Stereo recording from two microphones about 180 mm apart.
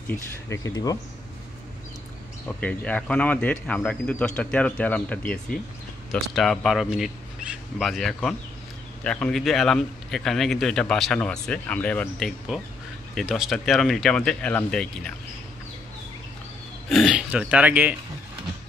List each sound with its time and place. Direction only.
0.1 s speech: 15° left (ahead or behind)
2.4 s speech: 5° left (ahead or behind)
16.9 s speech: 5° right (ahead or behind)